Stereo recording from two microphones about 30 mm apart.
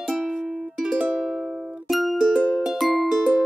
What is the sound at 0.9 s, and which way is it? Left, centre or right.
Music, right.